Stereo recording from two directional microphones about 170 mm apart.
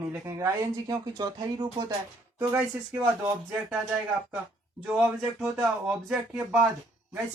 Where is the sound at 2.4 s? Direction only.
10° right (ahead or behind).